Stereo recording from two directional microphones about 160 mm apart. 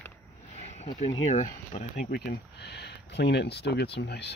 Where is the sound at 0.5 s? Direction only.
40° left (ahead or behind).